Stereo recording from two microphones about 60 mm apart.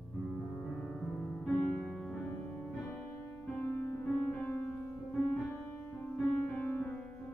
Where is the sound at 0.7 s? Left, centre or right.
Centre.